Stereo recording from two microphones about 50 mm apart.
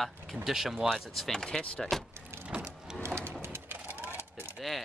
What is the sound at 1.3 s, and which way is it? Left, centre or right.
Speech, centre.